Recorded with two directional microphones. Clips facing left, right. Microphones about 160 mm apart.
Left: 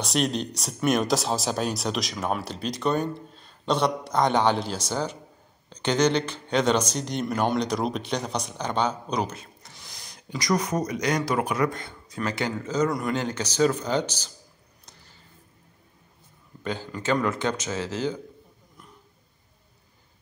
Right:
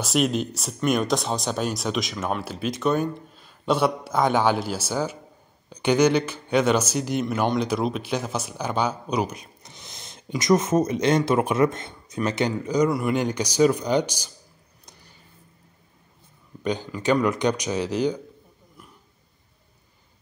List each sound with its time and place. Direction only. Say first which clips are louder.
0.0 s speech: right 3 dB; 5° right (ahead or behind)
14.9 s a sound: right 2 dB; 15° right (ahead or behind)
16.6 s speech: right 4 dB; 15° right (ahead or behind)